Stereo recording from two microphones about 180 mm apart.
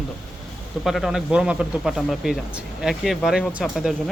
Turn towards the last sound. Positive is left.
turn(degrees=-5)  # may be behind; listen again after turning